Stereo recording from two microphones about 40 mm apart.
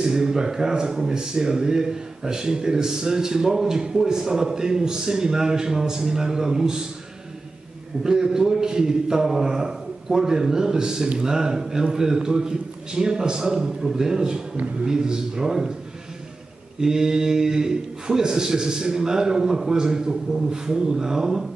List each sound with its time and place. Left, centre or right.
0.0 s speech: centre
8.0 s speech: centre
16.8 s speech: centre